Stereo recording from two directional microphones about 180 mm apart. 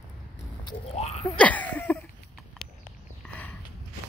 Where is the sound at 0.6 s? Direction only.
30° left (ahead or behind).